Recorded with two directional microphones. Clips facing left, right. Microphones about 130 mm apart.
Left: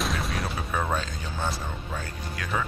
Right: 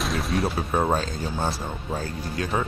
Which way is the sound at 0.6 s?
30° right (ahead or behind).